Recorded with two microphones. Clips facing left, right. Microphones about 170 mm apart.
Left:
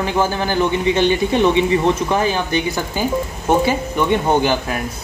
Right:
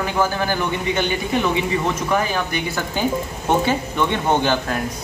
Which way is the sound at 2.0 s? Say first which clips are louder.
Left 3 dB; 25° left (ahead or behind).